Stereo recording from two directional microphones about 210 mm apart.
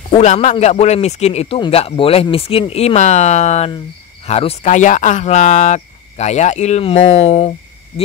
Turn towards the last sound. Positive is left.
turn(degrees=30)  # may be behind; listen again after turning